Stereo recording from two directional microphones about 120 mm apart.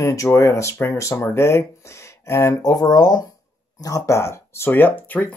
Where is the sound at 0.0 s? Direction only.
25° left (ahead or behind).